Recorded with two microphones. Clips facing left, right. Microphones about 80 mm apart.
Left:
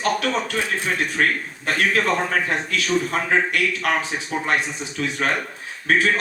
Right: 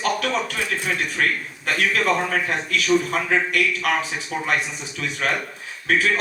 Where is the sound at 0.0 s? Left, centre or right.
Left.